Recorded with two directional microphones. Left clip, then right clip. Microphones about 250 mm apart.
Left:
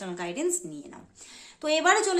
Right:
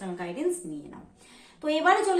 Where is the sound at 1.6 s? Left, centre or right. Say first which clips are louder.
Even; left.